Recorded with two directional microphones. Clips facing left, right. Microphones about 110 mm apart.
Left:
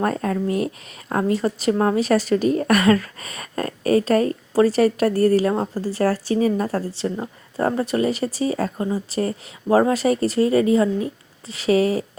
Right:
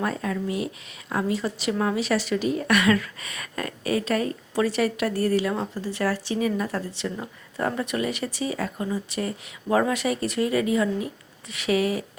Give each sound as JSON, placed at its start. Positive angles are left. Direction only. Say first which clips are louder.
{"t": 0.0, "sound": "a woman's voice", "louder": "left 5 dB", "side_deg": 45}